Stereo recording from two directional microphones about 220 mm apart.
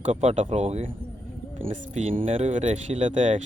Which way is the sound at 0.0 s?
30° right (ahead or behind).